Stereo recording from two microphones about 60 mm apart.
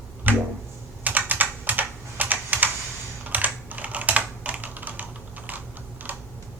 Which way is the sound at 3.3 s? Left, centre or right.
Right.